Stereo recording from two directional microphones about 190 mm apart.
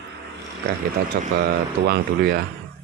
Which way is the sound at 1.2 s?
55° right (ahead or behind).